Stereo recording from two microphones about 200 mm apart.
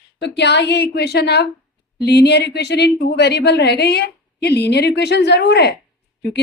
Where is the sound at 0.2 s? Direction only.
60° left (ahead or behind).